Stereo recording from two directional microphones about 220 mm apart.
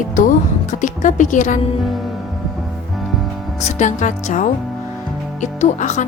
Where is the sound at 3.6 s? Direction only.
30° left (ahead or behind).